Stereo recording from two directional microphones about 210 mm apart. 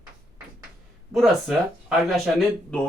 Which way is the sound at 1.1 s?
Centre (ahead or behind).